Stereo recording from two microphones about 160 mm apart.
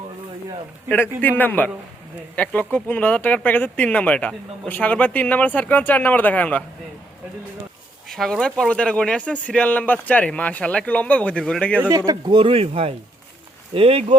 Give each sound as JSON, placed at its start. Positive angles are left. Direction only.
{"t": 0.9, "sound": "speech", "side_deg": 10}
{"t": 8.0, "sound": "speech", "side_deg": 0}
{"t": 11.8, "sound": "speech", "side_deg": -20}